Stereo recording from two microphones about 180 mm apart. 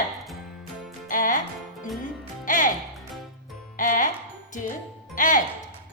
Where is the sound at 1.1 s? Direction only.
50° left (ahead or behind).